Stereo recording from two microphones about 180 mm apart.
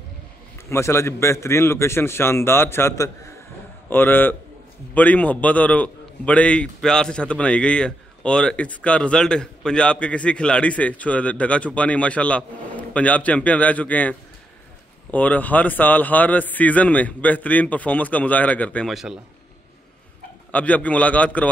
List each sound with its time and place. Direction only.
0.7 s a man's voice: 15° left (ahead or behind); by 19.1 s centre (ahead or behind)
20.5 s a man's voice: 10° left (ahead or behind)